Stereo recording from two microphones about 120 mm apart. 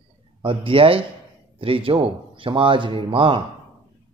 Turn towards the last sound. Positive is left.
turn(degrees=-45)  # may be behind; listen again after turning